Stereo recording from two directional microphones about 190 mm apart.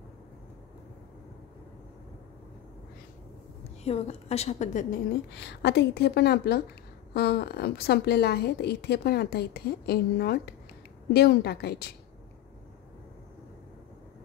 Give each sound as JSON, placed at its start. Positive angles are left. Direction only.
{"t": 3.8, "sound": "a woman's voice", "side_deg": 35}
{"t": 5.3, "sound": "a woman's voice", "side_deg": 65}